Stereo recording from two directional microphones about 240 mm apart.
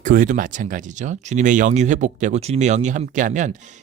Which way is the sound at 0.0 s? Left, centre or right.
Right.